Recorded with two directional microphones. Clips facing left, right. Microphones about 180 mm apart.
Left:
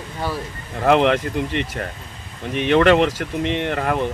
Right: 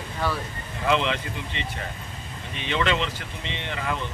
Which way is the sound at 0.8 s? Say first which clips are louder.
Left 8 dB; 60° left (ahead or behind).